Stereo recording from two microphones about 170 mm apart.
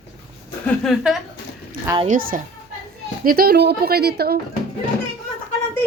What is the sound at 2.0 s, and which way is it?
A woman's voice, 50° right (ahead or behind).